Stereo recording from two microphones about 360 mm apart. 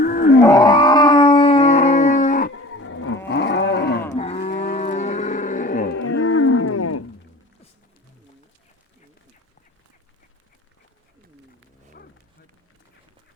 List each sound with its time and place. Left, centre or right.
0.0 s wild animals: left
0.4 s dog: centre
2.5 s cattle: left
4.1 s moo: centre
6.1 s wild animals: left